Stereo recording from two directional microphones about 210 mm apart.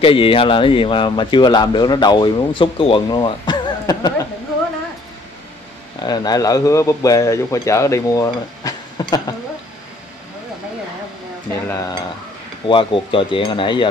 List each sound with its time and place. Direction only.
0.0 s speech: 25° left (ahead or behind)
5.9 s speech: 20° left (ahead or behind)
11.6 s speech: 15° left (ahead or behind)
12.6 s speech: 25° left (ahead or behind)